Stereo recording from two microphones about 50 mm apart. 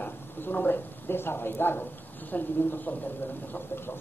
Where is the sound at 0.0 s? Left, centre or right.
Left.